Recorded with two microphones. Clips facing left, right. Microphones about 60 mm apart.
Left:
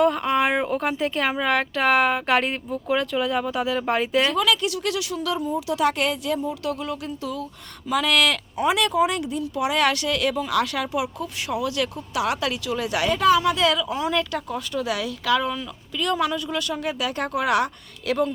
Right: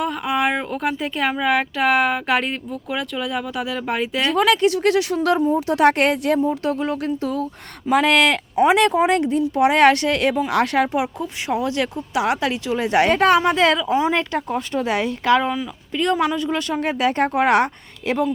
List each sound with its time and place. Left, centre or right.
0.0 s speech: centre
4.4 s speech: right
6.4 s speech: right